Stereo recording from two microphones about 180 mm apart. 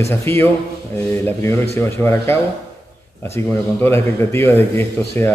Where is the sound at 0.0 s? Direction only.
15° left (ahead or behind).